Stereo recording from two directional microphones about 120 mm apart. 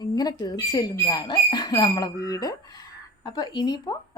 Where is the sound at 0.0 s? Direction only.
35° left (ahead or behind).